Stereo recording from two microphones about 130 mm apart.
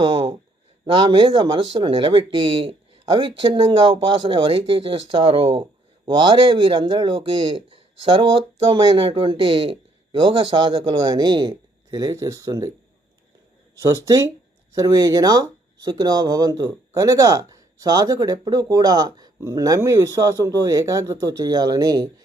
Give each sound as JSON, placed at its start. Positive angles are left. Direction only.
{"t": 0.0, "sound": "speech", "side_deg": -40}
{"t": 13.8, "sound": "speech", "side_deg": -25}